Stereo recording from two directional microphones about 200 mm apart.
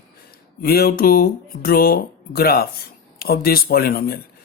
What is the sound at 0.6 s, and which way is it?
A man's voice, 50° left (ahead or behind).